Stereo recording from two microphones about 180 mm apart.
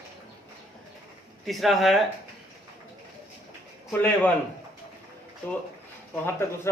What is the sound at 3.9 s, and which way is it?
Speech, 10° left (ahead or behind).